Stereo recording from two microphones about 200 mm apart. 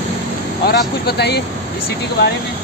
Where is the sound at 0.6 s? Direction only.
55° left (ahead or behind).